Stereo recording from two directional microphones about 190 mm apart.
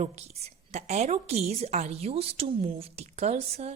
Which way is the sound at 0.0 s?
35° right (ahead or behind).